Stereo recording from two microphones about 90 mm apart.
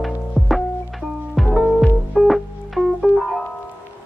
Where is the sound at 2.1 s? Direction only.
Centre (ahead or behind).